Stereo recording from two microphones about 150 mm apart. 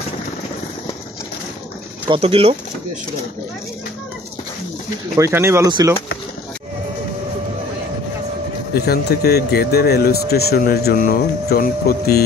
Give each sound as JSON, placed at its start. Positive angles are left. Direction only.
{"t": 2.0, "sound": "speech", "side_deg": -40}
{"t": 5.1, "sound": "speech", "side_deg": -15}
{"t": 8.7, "sound": "speech", "side_deg": 90}